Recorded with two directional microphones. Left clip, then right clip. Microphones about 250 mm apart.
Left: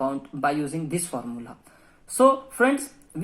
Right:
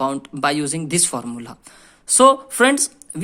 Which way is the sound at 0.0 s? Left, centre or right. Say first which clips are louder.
Right 5 dB; right.